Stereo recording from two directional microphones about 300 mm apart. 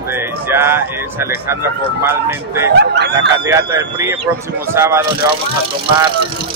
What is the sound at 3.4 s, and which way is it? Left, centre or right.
Speech, centre.